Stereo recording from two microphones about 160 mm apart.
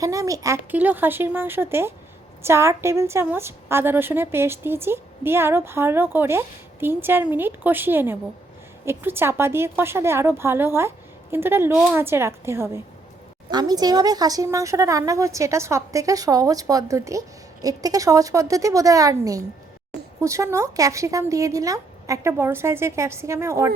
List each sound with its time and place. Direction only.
0.0 s a woman's voice: 20° right (ahead or behind)